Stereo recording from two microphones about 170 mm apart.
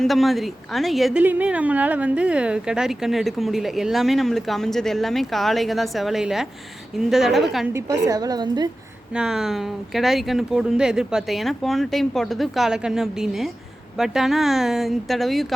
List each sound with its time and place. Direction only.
0.0 s speech: centre (ahead or behind)
7.7 s a woman's voice: 20° right (ahead or behind)
9.1 s speech: 5° right (ahead or behind)